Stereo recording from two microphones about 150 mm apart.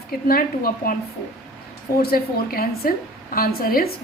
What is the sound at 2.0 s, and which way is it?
A woman's voice, 85° left.